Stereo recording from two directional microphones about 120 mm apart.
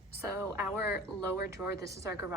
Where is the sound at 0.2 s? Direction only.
20° right (ahead or behind).